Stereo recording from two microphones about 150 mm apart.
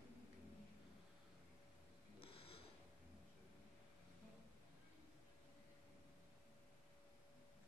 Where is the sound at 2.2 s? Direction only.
40° left (ahead or behind).